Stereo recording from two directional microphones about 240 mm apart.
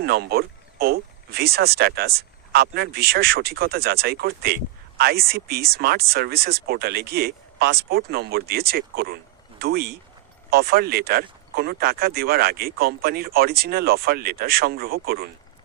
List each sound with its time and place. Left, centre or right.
0.0 s speech: right